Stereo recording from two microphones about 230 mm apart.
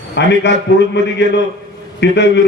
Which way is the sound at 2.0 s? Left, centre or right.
Left.